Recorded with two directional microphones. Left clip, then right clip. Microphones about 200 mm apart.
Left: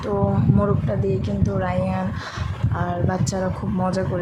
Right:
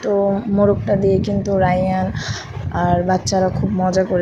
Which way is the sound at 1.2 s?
15° right (ahead or behind).